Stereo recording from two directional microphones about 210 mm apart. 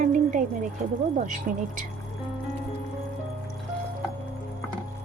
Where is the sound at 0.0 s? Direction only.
35° right (ahead or behind).